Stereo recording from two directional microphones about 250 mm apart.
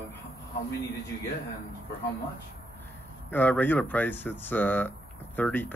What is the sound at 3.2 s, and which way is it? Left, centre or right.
Speech, centre.